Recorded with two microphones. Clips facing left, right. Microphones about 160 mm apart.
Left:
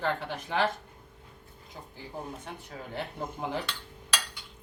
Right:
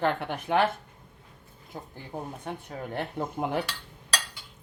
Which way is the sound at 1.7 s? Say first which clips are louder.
Right 3 dB; 55° right (ahead or behind).